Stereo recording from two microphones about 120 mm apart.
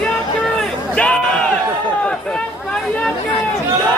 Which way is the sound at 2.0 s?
10° left (ahead or behind).